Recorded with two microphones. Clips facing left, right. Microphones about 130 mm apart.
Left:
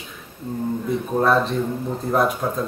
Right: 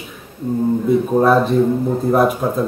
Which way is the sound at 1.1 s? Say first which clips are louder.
Right 4 dB; 5° right (ahead or behind).